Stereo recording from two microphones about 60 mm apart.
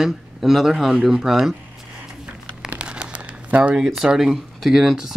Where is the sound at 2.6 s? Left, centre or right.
Centre.